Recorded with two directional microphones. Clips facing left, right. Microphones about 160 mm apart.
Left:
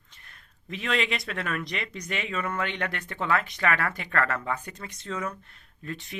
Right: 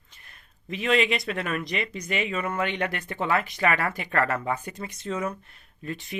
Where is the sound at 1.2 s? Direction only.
10° right (ahead or behind).